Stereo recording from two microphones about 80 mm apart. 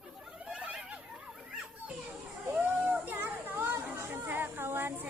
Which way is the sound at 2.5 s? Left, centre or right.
Centre.